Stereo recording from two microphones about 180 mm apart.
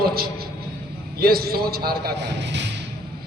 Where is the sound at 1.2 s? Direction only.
60° right (ahead or behind); by 2.6 s 75° right (ahead or behind).